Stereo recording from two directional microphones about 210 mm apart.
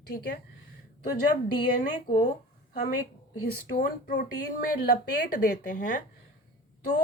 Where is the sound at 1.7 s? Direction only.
40° left (ahead or behind).